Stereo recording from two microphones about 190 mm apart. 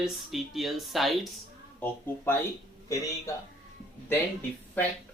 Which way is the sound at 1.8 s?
10° left (ahead or behind).